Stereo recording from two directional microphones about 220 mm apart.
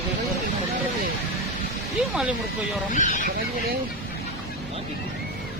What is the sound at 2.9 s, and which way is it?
Speech, 35° left (ahead or behind).